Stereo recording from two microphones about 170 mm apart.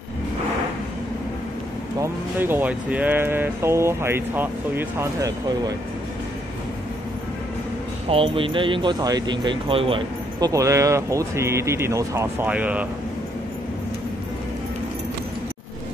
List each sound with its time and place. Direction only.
2.0 s speech: 10° right (ahead or behind)
8.1 s speech: 30° right (ahead or behind)
10.5 s speech: 20° right (ahead or behind)